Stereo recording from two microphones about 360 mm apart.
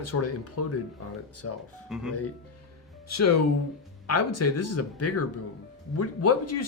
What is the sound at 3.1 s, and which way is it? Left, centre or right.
Speech, left.